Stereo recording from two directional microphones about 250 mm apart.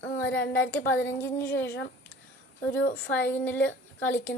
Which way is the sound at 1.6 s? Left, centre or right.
Left.